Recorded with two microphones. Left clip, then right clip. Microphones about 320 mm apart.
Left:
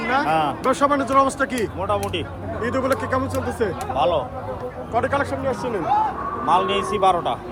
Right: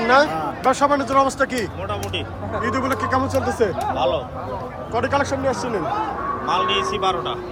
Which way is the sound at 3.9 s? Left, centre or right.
Centre.